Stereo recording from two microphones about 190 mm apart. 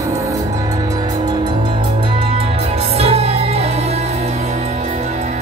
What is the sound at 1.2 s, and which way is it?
Music, 25° right (ahead or behind).